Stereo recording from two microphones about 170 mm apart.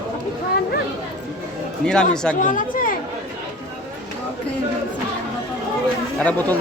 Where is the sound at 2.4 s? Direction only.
50° left (ahead or behind).